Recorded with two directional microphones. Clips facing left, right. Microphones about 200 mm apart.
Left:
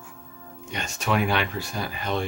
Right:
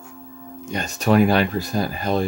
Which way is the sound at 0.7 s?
35° right (ahead or behind).